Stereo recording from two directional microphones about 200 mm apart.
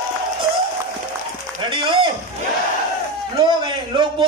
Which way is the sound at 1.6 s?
25° right (ahead or behind).